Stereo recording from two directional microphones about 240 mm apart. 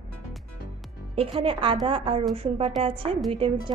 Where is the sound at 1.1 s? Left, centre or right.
Right.